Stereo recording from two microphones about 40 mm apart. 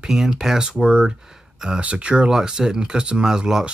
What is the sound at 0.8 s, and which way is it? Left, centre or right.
Speech, right.